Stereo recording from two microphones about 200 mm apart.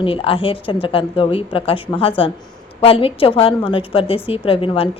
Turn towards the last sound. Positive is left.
turn(degrees=25)  # may be behind; listen again after turning